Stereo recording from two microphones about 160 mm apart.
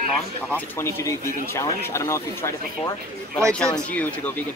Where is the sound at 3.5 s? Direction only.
5° left (ahead or behind).